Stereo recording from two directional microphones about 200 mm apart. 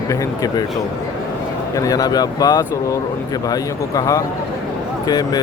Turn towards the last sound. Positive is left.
turn(degrees=20)  # may be behind; listen again after turning